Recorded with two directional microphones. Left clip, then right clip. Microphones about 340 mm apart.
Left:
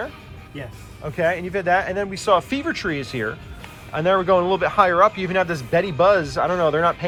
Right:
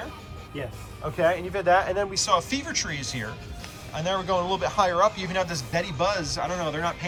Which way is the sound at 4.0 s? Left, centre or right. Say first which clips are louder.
Left 8 dB; centre.